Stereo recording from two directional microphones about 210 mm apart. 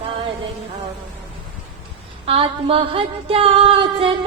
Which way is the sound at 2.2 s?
25° right (ahead or behind).